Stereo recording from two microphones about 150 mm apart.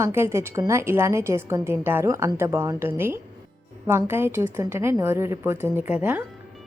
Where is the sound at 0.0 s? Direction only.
15° right (ahead or behind).